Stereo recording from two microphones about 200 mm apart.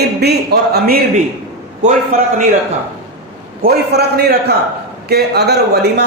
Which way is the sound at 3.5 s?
50° right (ahead or behind).